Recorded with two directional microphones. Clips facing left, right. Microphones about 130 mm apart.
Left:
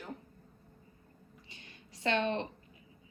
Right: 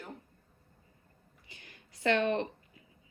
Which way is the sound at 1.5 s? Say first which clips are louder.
Right 3 dB; 20° left (ahead or behind).